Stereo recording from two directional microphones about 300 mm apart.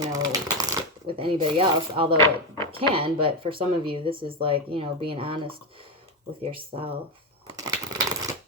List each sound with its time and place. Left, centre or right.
0.0 s shuffling cards: centre
2.7 s speech: centre
7.4 s crushing: centre